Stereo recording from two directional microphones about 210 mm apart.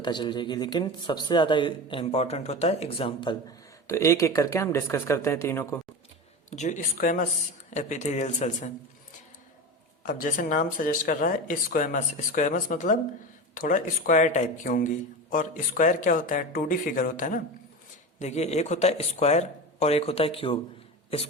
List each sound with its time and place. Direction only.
0.0 s speech: 20° left (ahead or behind)
3.8 s speech: 15° left (ahead or behind)
6.5 s speech: 35° left (ahead or behind)
10.1 s speech: 40° left (ahead or behind)